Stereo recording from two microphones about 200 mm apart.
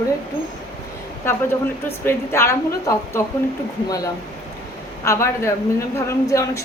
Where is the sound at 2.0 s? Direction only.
15° left (ahead or behind).